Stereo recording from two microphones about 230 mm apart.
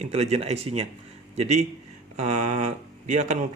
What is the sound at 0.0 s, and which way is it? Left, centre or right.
Speech, right.